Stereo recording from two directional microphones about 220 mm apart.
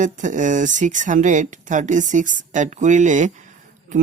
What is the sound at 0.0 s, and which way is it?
Speech, 35° right (ahead or behind).